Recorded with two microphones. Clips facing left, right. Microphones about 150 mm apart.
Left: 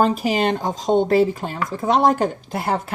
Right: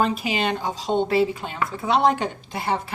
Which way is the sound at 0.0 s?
40° left (ahead or behind).